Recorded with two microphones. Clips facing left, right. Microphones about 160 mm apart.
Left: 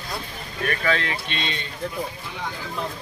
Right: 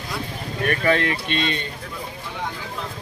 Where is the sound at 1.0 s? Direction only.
50° right (ahead or behind).